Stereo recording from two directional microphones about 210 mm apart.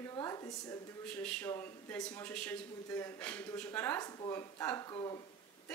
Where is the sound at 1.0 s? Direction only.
5° left (ahead or behind).